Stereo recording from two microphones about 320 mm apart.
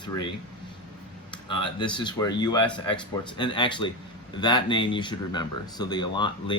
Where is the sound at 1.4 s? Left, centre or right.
Centre.